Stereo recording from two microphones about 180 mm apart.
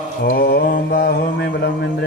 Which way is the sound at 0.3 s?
55° left (ahead or behind).